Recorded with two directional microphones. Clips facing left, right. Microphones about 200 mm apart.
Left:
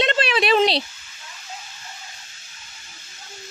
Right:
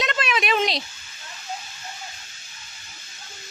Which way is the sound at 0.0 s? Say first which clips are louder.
Left 5 dB; 30° left (ahead or behind).